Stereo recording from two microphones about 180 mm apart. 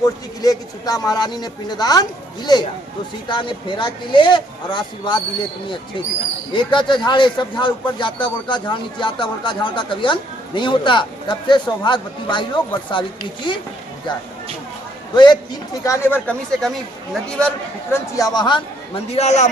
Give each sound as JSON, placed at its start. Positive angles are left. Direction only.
{"t": 0.0, "sound": "speech", "side_deg": 20}
{"t": 6.5, "sound": "speech", "side_deg": 25}
{"t": 15.1, "sound": "a man's voice", "side_deg": 25}
{"t": 17.9, "sound": "speech", "side_deg": 20}
{"t": 19.1, "sound": "a man's voice", "side_deg": 40}